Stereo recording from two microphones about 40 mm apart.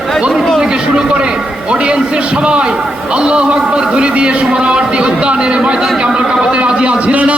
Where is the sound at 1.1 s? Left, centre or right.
Right.